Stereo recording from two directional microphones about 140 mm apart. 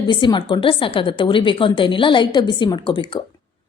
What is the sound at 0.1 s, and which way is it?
A woman's voice, 35° left (ahead or behind).